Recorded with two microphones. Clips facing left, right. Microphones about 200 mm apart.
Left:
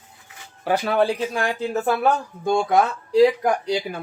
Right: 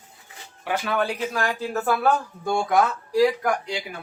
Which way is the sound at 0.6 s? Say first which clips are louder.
Left 5 dB; 35° left (ahead or behind).